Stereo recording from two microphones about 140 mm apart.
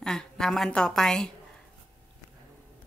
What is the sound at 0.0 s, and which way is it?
A woman's voice, 5° left (ahead or behind).